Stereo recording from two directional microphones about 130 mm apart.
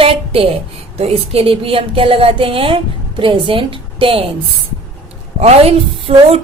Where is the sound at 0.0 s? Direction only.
45° right (ahead or behind).